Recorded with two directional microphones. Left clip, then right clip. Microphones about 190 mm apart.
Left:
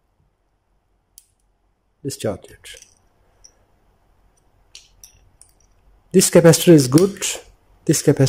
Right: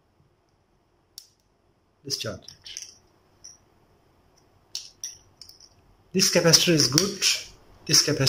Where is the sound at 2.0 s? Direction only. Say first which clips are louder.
Left 6 dB; 40° left (ahead or behind).